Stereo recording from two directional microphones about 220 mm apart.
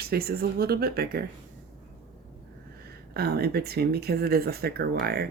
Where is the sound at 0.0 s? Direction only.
45° right (ahead or behind).